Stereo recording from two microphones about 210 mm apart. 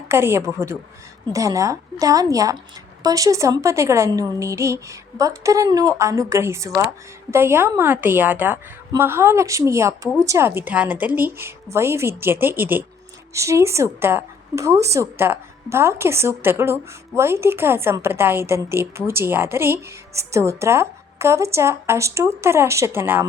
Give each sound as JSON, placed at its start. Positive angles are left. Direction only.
{"t": 0.1, "sound": "a woman's voice", "side_deg": -10}